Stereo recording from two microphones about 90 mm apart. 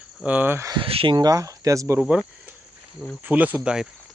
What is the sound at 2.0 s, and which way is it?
Speech, 10° right (ahead or behind).